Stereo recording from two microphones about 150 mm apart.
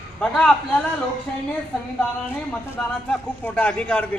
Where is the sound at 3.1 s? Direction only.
10° left (ahead or behind).